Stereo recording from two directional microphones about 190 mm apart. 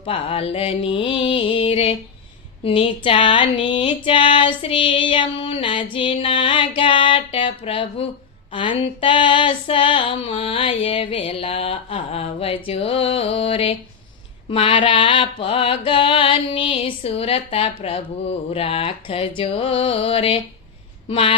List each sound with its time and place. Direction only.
0.0 s mantra: 30° left (ahead or behind)